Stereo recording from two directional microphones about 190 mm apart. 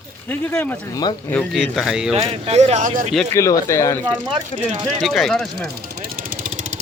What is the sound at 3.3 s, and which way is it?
Speech, 15° left (ahead or behind).